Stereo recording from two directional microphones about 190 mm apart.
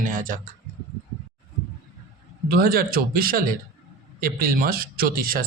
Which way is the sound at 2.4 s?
50° right (ahead or behind).